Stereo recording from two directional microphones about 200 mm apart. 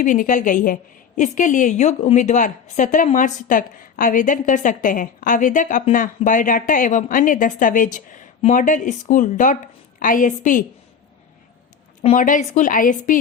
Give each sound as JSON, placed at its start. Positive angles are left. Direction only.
{"t": 0.0, "sound": "a woman's voice", "side_deg": 40}
{"t": 12.0, "sound": "a woman's voice", "side_deg": 40}